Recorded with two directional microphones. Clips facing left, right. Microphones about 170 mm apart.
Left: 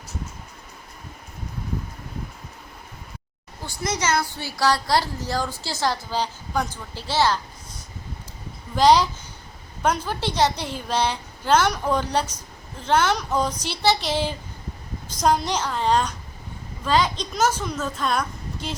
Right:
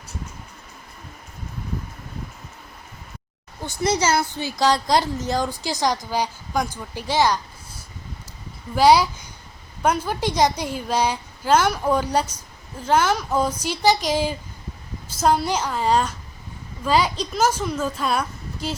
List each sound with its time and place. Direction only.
3.8 s a woman's voice: 30° right (ahead or behind); by 7.3 s 15° right (ahead or behind)
8.7 s a woman's voice: 10° right (ahead or behind)